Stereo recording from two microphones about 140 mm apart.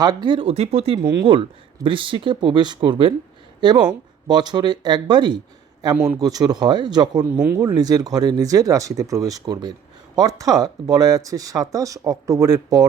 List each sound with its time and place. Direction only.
0.0 s speech: 30° right (ahead or behind)
7.3 s speech: 20° right (ahead or behind)